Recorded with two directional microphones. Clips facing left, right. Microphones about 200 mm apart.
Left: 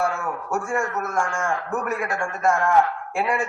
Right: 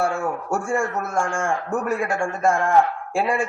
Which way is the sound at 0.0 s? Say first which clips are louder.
Right 2 dB; 30° right (ahead or behind).